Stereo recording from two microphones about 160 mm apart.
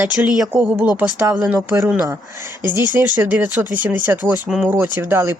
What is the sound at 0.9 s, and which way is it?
Speech, 10° right (ahead or behind).